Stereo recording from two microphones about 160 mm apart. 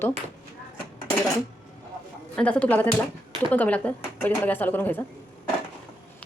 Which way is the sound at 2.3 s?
5° left (ahead or behind).